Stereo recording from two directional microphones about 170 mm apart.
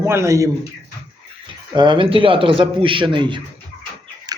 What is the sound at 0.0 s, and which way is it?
Speech, 15° right (ahead or behind).